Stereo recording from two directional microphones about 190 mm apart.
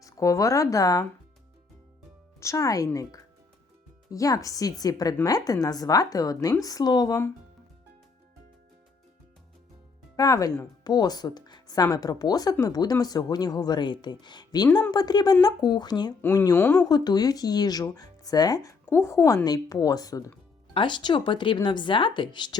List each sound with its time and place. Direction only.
0.0 s speech: 15° left (ahead or behind)
2.4 s speech: 15° left (ahead or behind)
10.2 s speech: 20° left (ahead or behind)